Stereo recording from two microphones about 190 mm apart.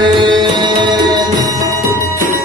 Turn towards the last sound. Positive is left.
turn(degrees=-25)  # may be behind; listen again after turning